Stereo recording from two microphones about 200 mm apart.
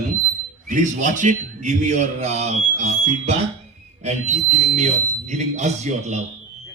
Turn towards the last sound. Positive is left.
turn(degrees=-35)  # may be behind; listen again after turning